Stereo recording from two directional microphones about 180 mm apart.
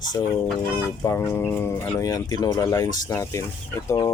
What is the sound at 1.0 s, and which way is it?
Speech, 15° left (ahead or behind).